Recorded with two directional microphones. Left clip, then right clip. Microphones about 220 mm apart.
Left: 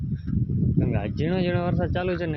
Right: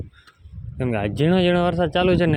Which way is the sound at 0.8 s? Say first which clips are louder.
Right 9 dB; 30° right (ahead or behind).